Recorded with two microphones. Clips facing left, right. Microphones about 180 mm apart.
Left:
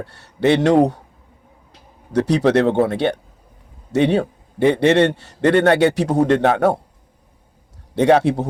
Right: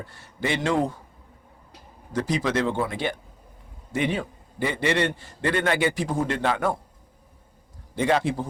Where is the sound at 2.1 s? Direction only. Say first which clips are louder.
Left 9 dB; 70° left (ahead or behind).